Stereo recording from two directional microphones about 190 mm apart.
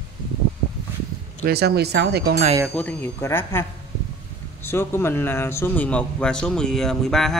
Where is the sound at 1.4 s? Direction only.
55° right (ahead or behind).